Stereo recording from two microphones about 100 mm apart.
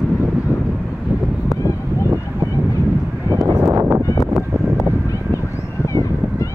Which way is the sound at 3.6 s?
25° right (ahead or behind).